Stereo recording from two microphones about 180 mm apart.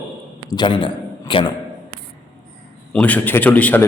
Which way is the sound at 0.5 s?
25° left (ahead or behind).